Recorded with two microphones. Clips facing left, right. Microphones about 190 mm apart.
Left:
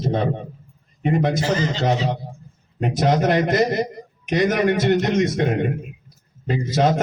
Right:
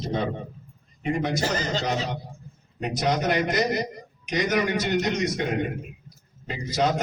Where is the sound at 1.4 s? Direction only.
40° right (ahead or behind).